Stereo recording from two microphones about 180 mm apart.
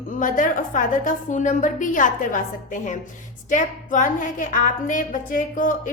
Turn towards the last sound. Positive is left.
turn(degrees=45)  # may be behind; listen again after turning